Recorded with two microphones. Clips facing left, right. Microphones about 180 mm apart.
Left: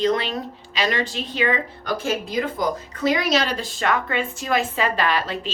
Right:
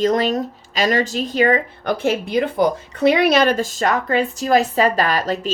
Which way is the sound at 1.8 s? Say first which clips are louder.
Right 5 dB; 60° right (ahead or behind).